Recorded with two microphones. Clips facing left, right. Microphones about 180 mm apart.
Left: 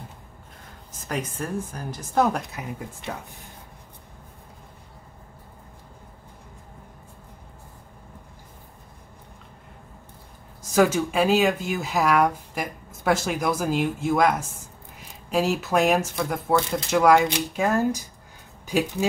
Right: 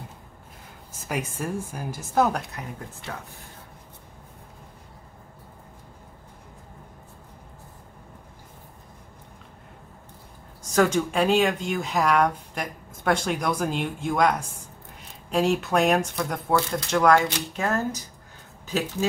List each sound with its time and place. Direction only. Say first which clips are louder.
1.0 s speech: even; 5° right (ahead or behind)
3.0 s speech: left 3 dB; 20° left (ahead or behind)
10.7 s speech: left 1 dB; 5° left (ahead or behind)